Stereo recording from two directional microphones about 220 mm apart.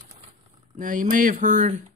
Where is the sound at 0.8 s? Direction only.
35° right (ahead or behind).